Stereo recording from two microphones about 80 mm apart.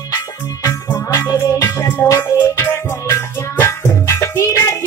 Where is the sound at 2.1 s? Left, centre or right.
Left.